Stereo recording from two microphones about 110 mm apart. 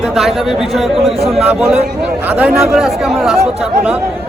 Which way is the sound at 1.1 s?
65° right (ahead or behind).